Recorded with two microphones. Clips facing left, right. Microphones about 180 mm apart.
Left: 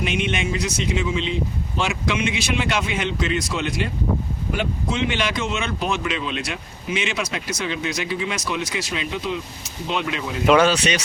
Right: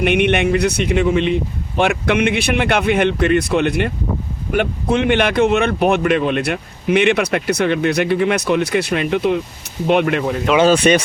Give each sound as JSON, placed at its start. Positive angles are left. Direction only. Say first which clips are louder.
{"t": 0.0, "sound": "speech", "louder": "right 9 dB", "side_deg": -60}